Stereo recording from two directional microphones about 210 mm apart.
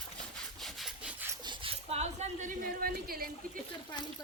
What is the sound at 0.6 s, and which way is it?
Wood, centre (ahead or behind).